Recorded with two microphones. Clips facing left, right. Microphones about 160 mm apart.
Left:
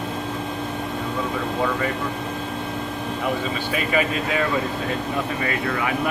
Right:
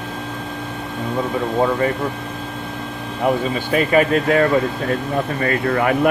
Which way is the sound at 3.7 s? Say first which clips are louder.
Right 8 dB; 45° right (ahead or behind).